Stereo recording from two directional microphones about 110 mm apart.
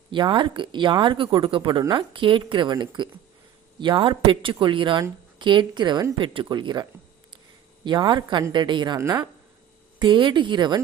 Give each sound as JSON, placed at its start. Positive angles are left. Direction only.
{"t": 0.1, "sound": "speech", "side_deg": -45}
{"t": 7.9, "sound": "speech", "side_deg": -45}
{"t": 9.0, "sound": "speech", "side_deg": -35}
{"t": 10.0, "sound": "speech", "side_deg": -45}